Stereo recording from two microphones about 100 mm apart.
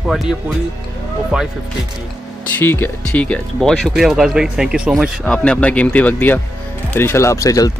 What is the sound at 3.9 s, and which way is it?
Speech, 5° right (ahead or behind).